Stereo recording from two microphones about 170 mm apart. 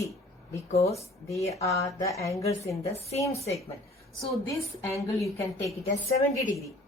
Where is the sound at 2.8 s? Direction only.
40° left (ahead or behind).